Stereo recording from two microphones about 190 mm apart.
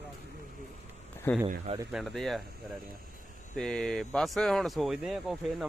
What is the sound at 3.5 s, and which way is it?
Speech, 5° left (ahead or behind).